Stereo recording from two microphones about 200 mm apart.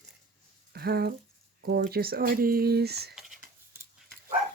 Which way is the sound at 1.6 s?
50° right (ahead or behind).